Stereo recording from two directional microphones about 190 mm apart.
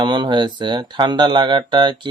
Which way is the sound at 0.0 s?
25° right (ahead or behind).